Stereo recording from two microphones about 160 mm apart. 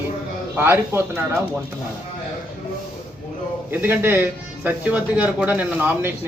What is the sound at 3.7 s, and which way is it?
Speech, 15° right (ahead or behind).